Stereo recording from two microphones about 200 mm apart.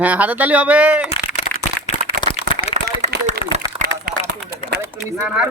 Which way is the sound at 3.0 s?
35° right (ahead or behind).